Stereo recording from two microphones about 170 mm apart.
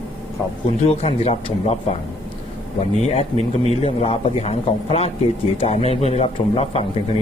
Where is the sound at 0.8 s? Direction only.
40° left (ahead or behind).